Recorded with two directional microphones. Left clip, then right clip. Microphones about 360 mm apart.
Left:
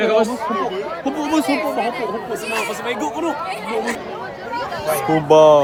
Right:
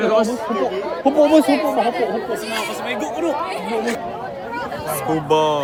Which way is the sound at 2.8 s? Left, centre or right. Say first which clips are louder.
Even; centre.